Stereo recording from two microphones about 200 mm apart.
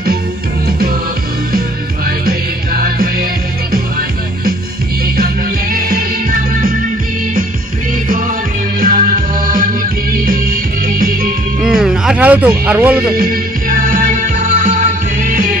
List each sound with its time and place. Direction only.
0.7 s music: 50° right (ahead or behind)
2.0 s music: 50° right (ahead or behind)
5.0 s music: 50° right (ahead or behind)
8.7 s music: 45° right (ahead or behind)
11.6 s a sound: 5° right (ahead or behind)
13.0 s music: 50° right (ahead or behind)